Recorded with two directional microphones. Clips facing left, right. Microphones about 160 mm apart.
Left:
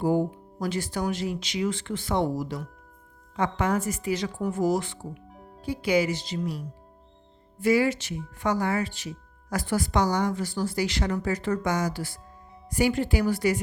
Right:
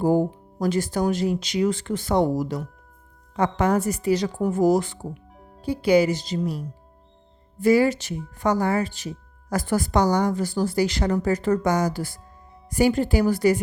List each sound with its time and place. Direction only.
0.0 s speech: 45° right (ahead or behind)
5.3 s music: centre (ahead or behind)
5.6 s speech: 35° right (ahead or behind)
7.6 s speech: 40° right (ahead or behind)